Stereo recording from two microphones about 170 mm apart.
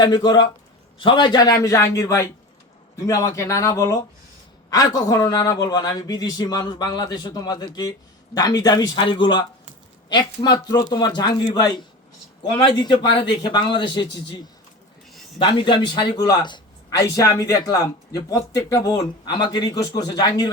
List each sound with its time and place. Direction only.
0.0 s speech: 25° left (ahead or behind)
15.4 s speech: 30° left (ahead or behind)